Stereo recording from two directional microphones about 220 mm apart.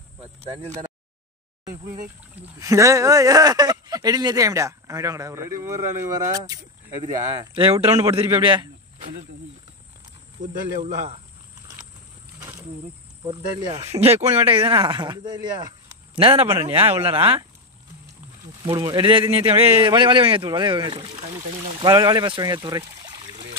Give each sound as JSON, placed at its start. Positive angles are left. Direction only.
{"t": 2.6, "sound": "speech", "side_deg": -15}
{"t": 10.4, "sound": "speech", "side_deg": -30}
{"t": 12.4, "sound": "insect", "side_deg": -15}
{"t": 13.2, "sound": "speech", "side_deg": -20}
{"t": 18.7, "sound": "speech", "side_deg": -20}